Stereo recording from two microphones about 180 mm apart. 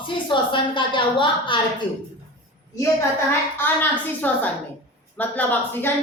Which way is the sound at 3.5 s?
10° left (ahead or behind).